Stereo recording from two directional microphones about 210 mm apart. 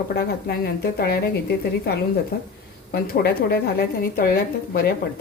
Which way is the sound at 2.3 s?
45° left (ahead or behind).